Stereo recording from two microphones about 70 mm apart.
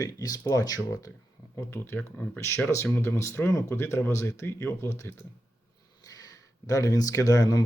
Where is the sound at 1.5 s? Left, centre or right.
Left.